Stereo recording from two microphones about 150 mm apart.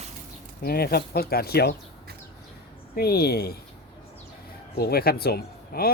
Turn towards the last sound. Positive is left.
turn(degrees=90)